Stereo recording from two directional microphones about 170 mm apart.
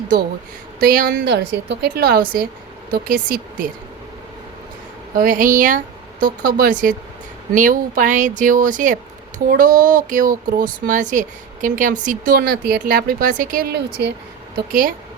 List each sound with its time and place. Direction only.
0.8 s a woman's voice: 55° right (ahead or behind)
5.1 s speech: 55° right (ahead or behind); by 14.1 s 75° right (ahead or behind)
14.5 s speech: 55° right (ahead or behind)